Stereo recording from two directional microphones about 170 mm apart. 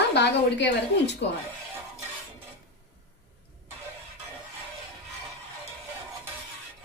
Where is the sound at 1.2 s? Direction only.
90° left.